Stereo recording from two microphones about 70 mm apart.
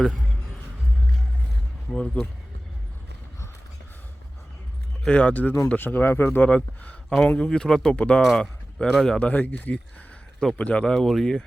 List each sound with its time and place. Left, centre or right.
1.9 s speech: centre
5.0 s speech: centre; by 6.4 s left
6.4 s speech: centre
8.2 s speech: centre
9.1 s speech: centre
10.8 s speech: centre